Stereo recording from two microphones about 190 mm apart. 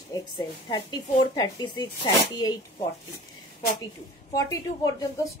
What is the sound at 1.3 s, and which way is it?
Speech, 20° left (ahead or behind).